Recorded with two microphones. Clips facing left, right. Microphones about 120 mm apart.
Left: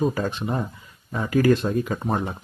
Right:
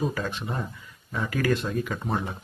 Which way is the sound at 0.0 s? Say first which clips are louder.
Left 5 dB; 40° left (ahead or behind).